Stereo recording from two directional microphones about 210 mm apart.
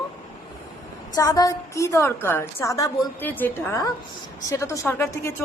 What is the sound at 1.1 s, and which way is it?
Speech, 15° left (ahead or behind).